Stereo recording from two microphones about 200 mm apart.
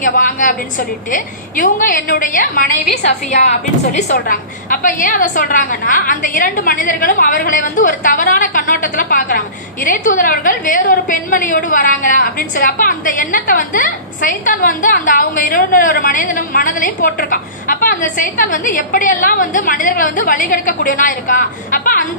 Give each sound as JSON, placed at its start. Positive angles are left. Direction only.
{"t": 0.0, "sound": "a woman's voice", "side_deg": 40}